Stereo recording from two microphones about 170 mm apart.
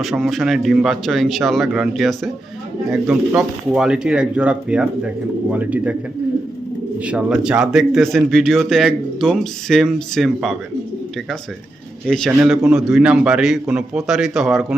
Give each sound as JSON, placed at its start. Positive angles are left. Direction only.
{"t": 0.0, "sound": "speech", "side_deg": 0}
{"t": 7.0, "sound": "speech", "side_deg": -5}
{"t": 12.0, "sound": "speech", "side_deg": 5}